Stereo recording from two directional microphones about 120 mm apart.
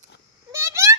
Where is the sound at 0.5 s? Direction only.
25° right (ahead or behind).